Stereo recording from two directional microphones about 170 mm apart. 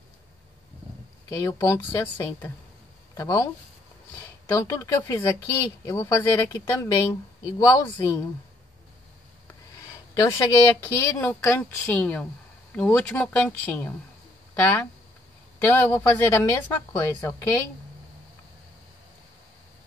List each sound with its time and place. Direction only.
1.3 s speech: 15° left (ahead or behind)
10.2 s speech: 15° left (ahead or behind)